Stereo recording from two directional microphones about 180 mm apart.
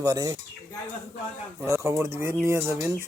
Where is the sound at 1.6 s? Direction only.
15° right (ahead or behind).